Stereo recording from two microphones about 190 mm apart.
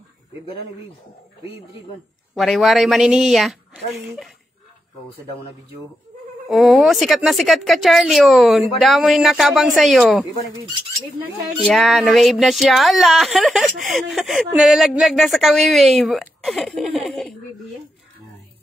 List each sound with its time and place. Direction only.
2.3 s speech: centre (ahead or behind)
6.5 s speech: centre (ahead or behind)
10.2 s speech: 20° left (ahead or behind)
11.6 s speech: centre (ahead or behind)